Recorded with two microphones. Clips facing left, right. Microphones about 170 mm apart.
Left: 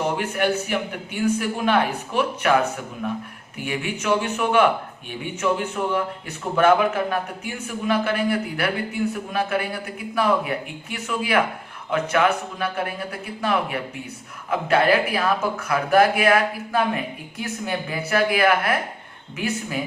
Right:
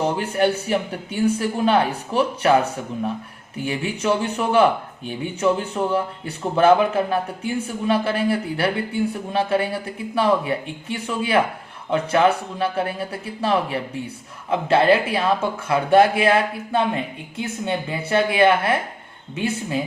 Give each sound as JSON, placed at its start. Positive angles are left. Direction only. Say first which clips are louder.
{"t": 0.0, "sound": "speech", "louder": "right 3 dB", "side_deg": -30}
{"t": 3.6, "sound": "speech", "louder": "right 3 dB", "side_deg": -35}